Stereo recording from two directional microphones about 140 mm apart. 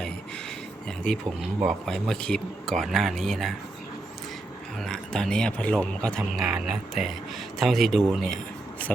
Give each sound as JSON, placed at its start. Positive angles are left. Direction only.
{"t": 0.9, "sound": "a sound", "side_deg": 5}
{"t": 1.6, "sound": "speech", "side_deg": 5}
{"t": 4.8, "sound": "speech", "side_deg": 5}